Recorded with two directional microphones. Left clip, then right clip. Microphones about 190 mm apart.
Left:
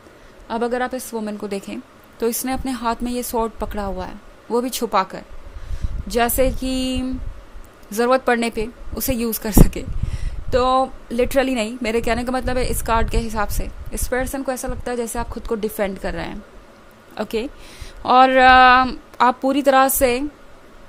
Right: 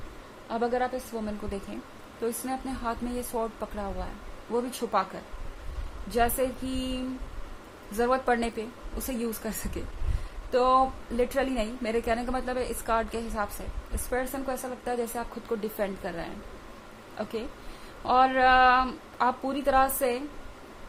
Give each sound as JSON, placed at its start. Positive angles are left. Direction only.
{"t": 0.4, "sound": "a woman's voice", "side_deg": 50}
{"t": 6.1, "sound": "a woman's voice", "side_deg": 55}